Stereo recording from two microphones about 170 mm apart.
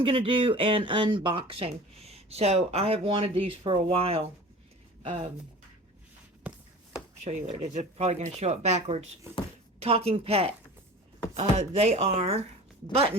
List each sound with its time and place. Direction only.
0.0 s speech: 30° right (ahead or behind)
7.7 s speech: 40° right (ahead or behind)